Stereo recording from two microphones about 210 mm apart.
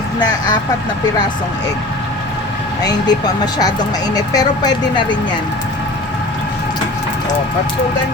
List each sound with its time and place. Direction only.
2.8 s speech: 20° left (ahead or behind)